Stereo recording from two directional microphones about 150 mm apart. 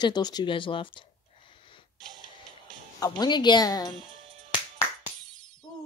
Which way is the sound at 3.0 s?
30° left (ahead or behind).